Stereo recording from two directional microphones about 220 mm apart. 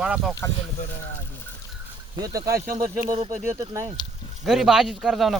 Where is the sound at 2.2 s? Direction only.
15° right (ahead or behind).